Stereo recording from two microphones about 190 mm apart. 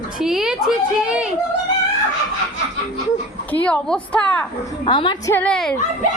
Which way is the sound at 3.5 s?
5° left (ahead or behind).